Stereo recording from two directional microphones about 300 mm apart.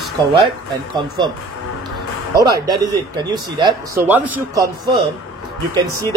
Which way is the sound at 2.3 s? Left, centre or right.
Centre.